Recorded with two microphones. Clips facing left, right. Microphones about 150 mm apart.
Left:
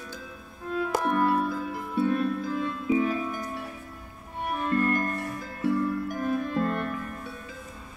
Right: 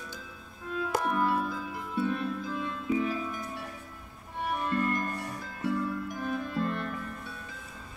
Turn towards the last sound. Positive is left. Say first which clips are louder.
# left 4 dB
turn(degrees=55)  # may be behind; listen again after turning